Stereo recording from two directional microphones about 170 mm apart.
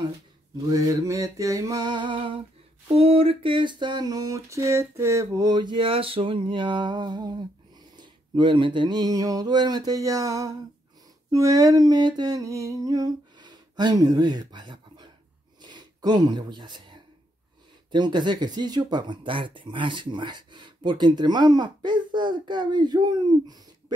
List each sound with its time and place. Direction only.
0.7 s speech: 20° right (ahead or behind)
11.2 s humming: 20° right (ahead or behind)
15.6 s a sound: 25° right (ahead or behind)
17.9 s speech: 25° right (ahead or behind)